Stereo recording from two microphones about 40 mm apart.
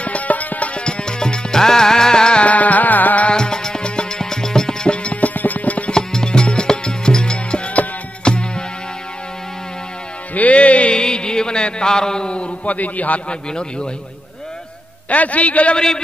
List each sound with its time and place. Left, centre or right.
0.0 s music: left
0.7 s music: left
2.4 s music: left
3.3 s music: centre
4.8 s music: left
5.9 s music: centre
10.3 s music: left
11.0 s music: left
12.6 s a man's voice: left
13.3 s a man's voice: left
15.0 s a man's voice: left